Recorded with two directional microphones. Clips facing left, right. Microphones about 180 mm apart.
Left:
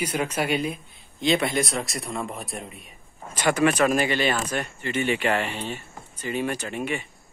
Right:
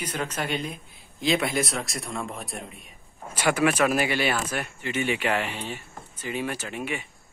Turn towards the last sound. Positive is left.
turn(degrees=-10)  # may be behind; listen again after turning